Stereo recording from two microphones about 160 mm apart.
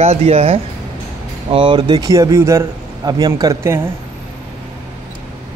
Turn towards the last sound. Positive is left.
turn(degrees=-20)  # may be behind; listen again after turning